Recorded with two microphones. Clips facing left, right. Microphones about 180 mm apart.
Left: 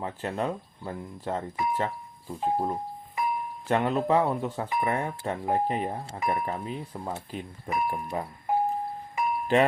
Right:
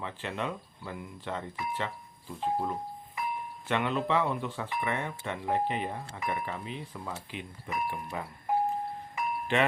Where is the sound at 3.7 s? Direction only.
40° left (ahead or behind).